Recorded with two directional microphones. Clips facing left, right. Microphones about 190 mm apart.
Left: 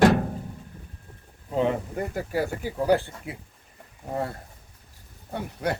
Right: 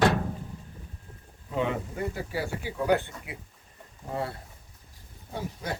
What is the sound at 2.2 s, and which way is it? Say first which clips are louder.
Speech: left 5 dB; 45° left (ahead or behind).